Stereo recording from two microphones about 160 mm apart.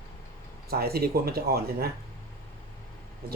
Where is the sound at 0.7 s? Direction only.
75° right (ahead or behind).